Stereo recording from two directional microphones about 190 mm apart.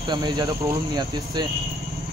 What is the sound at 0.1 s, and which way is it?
Speech, 20° right (ahead or behind).